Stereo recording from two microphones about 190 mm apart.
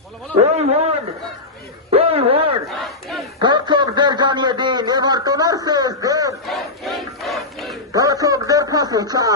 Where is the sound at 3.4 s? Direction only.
25° right (ahead or behind).